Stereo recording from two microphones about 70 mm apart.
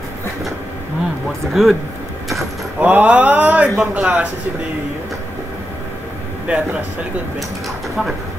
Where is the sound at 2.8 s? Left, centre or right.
Right.